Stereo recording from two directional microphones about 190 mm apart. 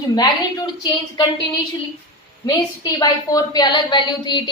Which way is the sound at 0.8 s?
25° left (ahead or behind).